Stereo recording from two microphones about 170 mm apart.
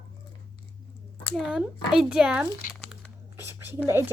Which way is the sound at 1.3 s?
5° right (ahead or behind).